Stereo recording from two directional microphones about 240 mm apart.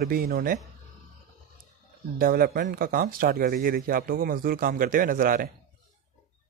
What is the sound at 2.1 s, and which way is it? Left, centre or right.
Speech, right.